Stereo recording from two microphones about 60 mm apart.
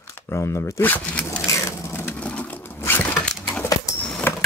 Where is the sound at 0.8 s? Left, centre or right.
Left.